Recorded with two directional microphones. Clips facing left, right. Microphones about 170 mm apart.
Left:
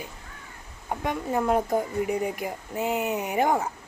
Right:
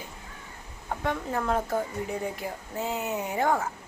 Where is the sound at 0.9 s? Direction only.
15° left (ahead or behind).